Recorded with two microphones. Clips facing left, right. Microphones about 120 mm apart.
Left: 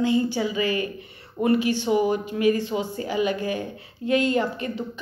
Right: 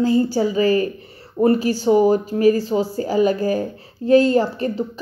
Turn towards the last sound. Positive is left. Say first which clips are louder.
# right 7 dB
turn(degrees=-35)  # may be behind; listen again after turning